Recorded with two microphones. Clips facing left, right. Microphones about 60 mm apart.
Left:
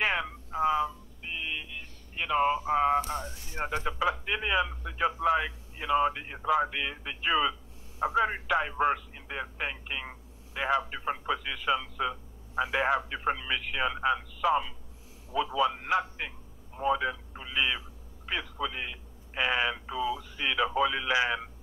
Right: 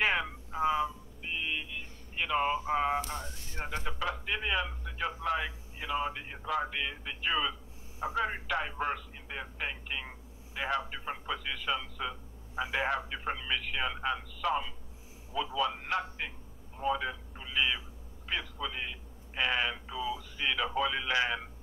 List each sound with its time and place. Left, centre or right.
0.0 s mantra: centre
3.1 s a man's voice: centre
20.0 s speech: left
20.3 s speech: centre